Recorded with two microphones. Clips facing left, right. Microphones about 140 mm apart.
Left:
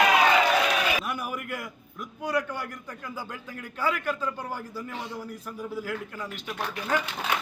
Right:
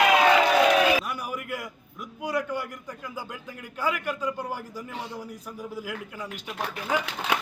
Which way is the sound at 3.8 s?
10° right (ahead or behind).